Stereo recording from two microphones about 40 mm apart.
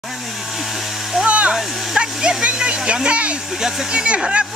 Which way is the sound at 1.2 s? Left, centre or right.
Right.